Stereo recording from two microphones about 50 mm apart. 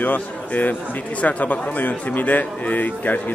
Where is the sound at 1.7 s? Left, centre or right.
Left.